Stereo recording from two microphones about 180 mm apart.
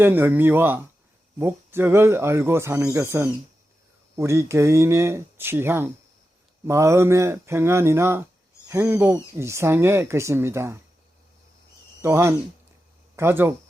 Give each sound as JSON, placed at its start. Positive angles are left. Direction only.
{"t": 0.0, "sound": "speech", "side_deg": -10}
{"t": 12.0, "sound": "speech", "side_deg": -15}